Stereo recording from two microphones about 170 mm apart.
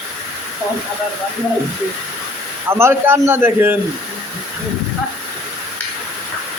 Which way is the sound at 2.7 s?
15° right (ahead or behind).